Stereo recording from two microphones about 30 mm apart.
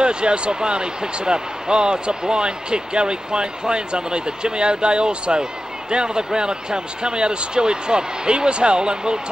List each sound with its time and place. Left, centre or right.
0.0 s speech: right